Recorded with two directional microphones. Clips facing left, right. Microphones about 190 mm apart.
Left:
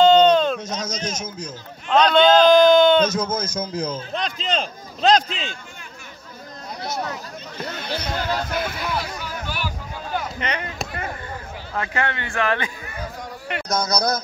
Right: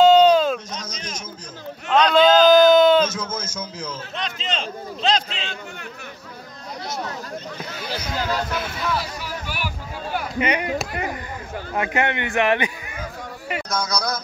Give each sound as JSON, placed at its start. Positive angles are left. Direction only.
{"t": 0.0, "sound": "bleat", "side_deg": -5}
{"t": 0.7, "sound": "speech", "side_deg": 40}
{"t": 1.9, "sound": "speech", "side_deg": -5}
{"t": 3.1, "sound": "a man's voice", "side_deg": 35}
{"t": 7.8, "sound": "speech", "side_deg": -5}
{"t": 10.1, "sound": "chop", "side_deg": -10}
{"t": 11.7, "sound": "a man's voice", "side_deg": -15}
{"t": 13.5, "sound": "a sound", "side_deg": -5}
{"t": 13.8, "sound": "a man's voice", "side_deg": 40}